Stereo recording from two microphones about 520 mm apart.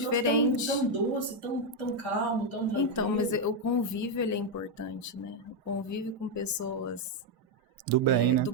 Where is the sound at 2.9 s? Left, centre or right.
Left.